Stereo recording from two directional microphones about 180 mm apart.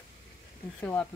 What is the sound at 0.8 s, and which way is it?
Speech, 10° left (ahead or behind).